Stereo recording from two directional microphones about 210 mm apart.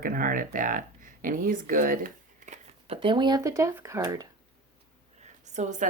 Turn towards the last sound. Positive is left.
turn(degrees=-35)  # may be behind; listen again after turning